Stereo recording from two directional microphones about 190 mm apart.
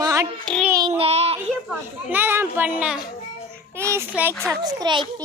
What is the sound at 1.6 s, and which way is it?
A child's voice, 10° right (ahead or behind).